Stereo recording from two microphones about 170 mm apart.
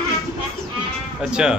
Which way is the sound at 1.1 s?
5° right (ahead or behind).